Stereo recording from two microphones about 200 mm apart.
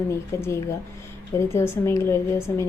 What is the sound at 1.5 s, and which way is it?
A woman's voice, 15° left (ahead or behind).